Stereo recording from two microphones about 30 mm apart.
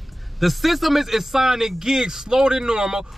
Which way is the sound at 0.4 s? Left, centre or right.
Centre.